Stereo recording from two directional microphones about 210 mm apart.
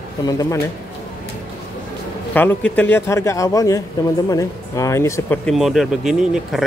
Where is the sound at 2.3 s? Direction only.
10° left (ahead or behind).